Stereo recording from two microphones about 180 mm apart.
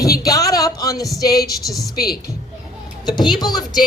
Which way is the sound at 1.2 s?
20° left (ahead or behind).